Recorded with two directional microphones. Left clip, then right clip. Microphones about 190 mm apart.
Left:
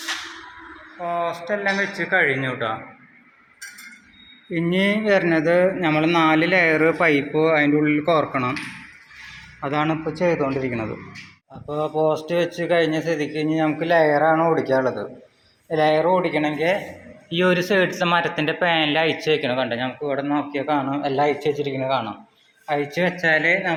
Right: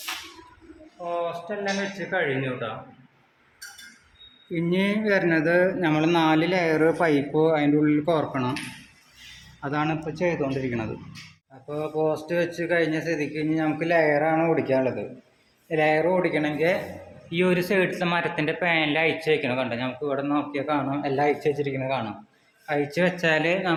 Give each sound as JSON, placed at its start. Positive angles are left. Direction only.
{"t": 1.0, "sound": "speech", "side_deg": 45}
{"t": 4.5, "sound": "speech", "side_deg": 5}
{"t": 9.6, "sound": "speech", "side_deg": 0}
{"t": 10.2, "sound": "a man's voice", "side_deg": 15}